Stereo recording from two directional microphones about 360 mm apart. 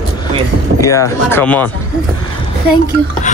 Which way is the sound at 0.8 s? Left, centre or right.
Centre.